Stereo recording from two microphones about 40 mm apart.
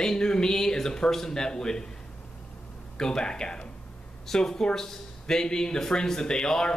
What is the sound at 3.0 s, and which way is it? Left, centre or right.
Speech, centre.